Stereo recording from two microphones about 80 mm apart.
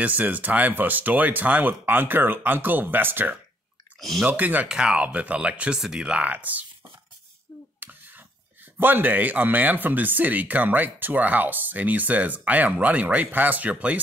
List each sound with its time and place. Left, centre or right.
0.0 s speech: right
4.0 s speech: centre
4.3 s speech: right
4.6 s speech: centre
7.8 s a sound: right
8.7 s speech: right